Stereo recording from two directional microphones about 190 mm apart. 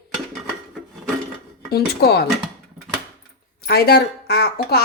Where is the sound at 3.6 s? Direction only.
55° left (ahead or behind).